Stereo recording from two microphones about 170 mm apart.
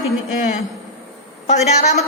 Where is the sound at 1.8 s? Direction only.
40° left (ahead or behind).